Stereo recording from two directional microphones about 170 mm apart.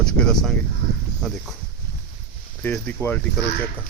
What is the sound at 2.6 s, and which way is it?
Speech, 10° left (ahead or behind).